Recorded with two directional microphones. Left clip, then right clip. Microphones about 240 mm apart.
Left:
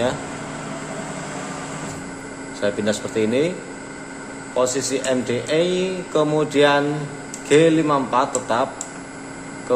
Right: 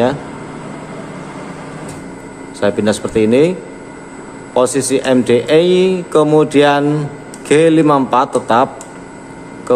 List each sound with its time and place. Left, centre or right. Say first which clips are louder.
2.6 s speech: right 7 dB; right
4.6 s speech: right 7 dB; right